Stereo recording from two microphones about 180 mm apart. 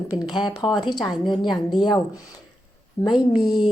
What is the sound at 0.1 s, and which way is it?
A woman's voice, 25° left (ahead or behind).